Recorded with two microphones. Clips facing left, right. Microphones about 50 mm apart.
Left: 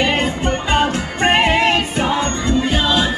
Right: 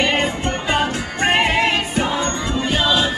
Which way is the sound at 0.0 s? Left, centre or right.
Centre.